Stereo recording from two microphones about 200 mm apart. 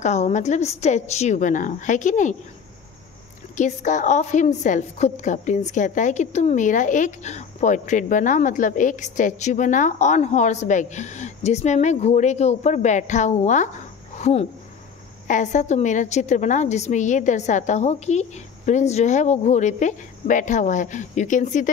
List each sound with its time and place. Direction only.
0.0 s a woman's voice: 35° left (ahead or behind)
3.5 s a woman's voice: 40° left (ahead or behind)